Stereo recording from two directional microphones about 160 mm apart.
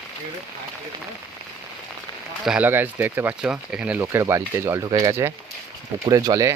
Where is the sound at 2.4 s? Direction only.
10° right (ahead or behind).